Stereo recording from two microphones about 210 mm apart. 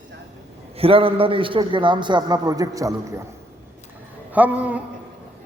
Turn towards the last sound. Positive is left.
turn(degrees=-5)  # may be behind; listen again after turning